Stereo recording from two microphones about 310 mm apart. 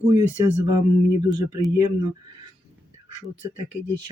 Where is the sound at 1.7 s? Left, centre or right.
Centre.